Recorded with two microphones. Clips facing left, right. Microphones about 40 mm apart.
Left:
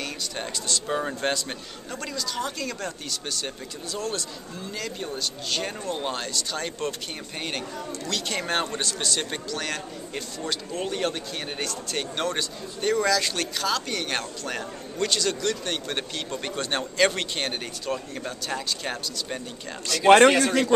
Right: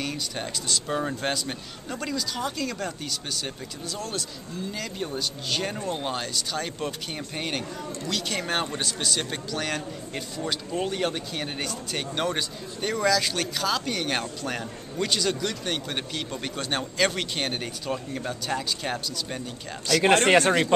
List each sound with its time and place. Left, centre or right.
0.0 s speech: centre
20.2 s speech: right